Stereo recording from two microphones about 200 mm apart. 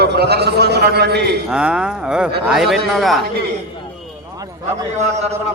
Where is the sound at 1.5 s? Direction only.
5° right (ahead or behind).